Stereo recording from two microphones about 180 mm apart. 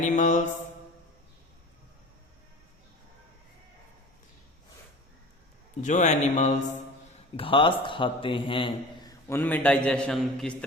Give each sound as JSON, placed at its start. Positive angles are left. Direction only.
{"t": 0.0, "sound": "mantra", "side_deg": 45}
{"t": 5.8, "sound": "speech", "side_deg": 40}
{"t": 7.3, "sound": "a man's voice", "side_deg": 30}
{"t": 9.3, "sound": "a man's voice", "side_deg": 10}